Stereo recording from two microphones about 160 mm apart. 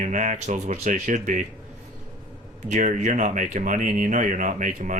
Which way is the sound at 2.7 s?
50° right (ahead or behind).